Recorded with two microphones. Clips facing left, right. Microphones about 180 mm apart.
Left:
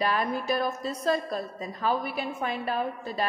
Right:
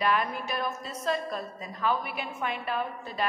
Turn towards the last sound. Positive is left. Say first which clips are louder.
# left 2 dB
turn(degrees=35)  # may be behind; listen again after turning